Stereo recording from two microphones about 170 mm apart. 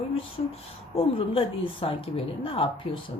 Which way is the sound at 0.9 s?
35° left (ahead or behind).